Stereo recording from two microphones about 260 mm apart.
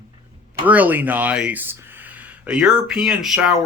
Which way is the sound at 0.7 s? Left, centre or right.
Centre.